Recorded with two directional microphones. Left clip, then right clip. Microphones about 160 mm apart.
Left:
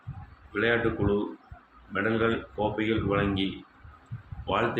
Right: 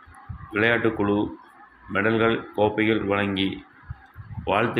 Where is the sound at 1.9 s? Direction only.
35° right (ahead or behind).